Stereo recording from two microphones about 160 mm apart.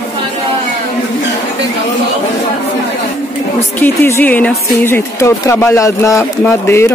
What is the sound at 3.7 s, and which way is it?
Speech, 15° left (ahead or behind).